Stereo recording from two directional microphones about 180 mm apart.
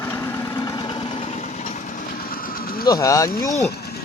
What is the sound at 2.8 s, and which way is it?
Speech, 20° left (ahead or behind).